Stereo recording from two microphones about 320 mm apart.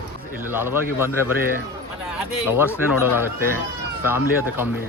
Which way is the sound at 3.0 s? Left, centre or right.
Centre.